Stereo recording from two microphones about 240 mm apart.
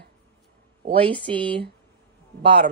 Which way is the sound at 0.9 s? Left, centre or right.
Right.